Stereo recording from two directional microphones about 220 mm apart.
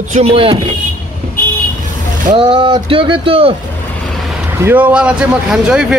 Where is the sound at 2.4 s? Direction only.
25° right (ahead or behind).